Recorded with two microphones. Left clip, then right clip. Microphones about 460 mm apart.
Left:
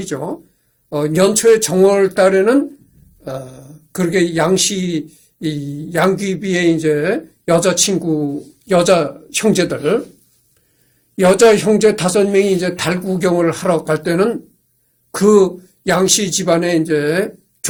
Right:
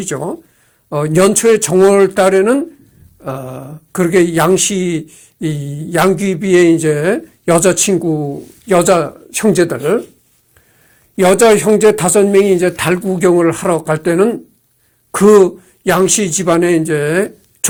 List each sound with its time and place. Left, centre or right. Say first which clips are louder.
0.1 s speech: right 1 dB; right
11.2 s speech: right 1 dB; right
15.1 s a man's voice: right 4 dB; right